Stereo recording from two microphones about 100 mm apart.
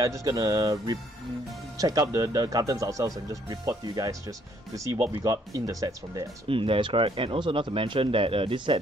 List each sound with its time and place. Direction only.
0.0 s speech: 35° right (ahead or behind)
5.2 s speech: 35° right (ahead or behind)
6.5 s speech: 65° right (ahead or behind)